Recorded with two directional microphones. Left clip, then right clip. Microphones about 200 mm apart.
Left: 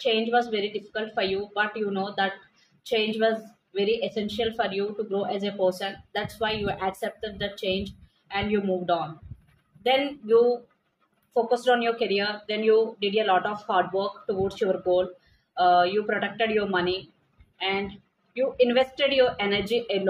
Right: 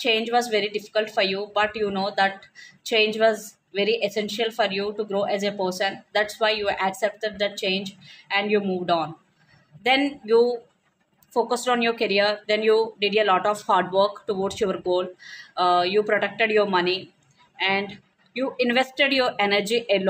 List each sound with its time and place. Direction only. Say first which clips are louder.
0.0 s a woman's voice: right 2 dB; 50° right (ahead or behind)